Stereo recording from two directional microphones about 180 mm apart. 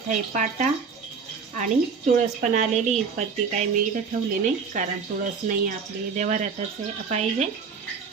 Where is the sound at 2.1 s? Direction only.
40° right (ahead or behind).